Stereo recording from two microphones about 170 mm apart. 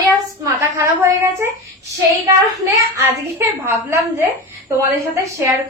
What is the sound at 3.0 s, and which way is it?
A woman's voice, 15° right (ahead or behind).